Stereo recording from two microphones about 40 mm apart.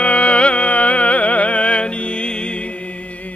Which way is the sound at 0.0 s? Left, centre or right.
Left.